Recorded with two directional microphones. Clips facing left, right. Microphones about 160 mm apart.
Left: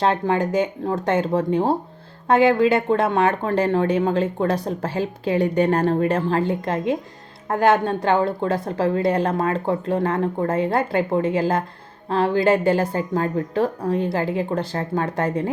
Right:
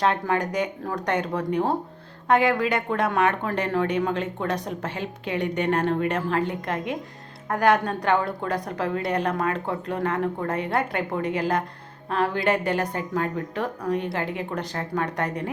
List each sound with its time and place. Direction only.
0.0 s a woman's voice: 30° left (ahead or behind)